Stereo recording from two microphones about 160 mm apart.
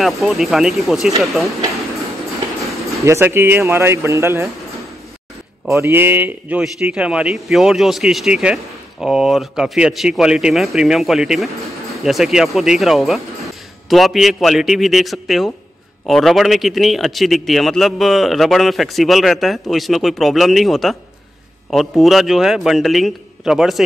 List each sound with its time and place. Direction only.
0.0 s a man's voice: centre (ahead or behind)
3.1 s speech: 15° right (ahead or behind)
5.8 s a man's voice: 15° right (ahead or behind)